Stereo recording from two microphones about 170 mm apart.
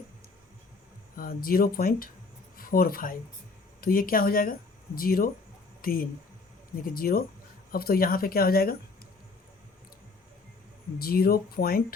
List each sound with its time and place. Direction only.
1.1 s speech: 55° left (ahead or behind)
10.9 s speech: 60° left (ahead or behind)